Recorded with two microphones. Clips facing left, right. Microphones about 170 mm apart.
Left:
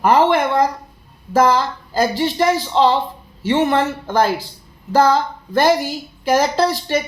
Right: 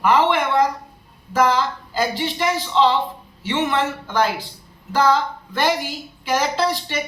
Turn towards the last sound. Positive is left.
turn(degrees=40)  # may be behind; listen again after turning